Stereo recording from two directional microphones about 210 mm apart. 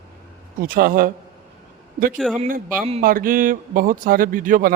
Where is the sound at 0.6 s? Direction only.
45° right (ahead or behind).